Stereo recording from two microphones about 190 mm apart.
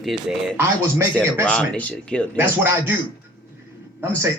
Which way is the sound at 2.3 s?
10° right (ahead or behind).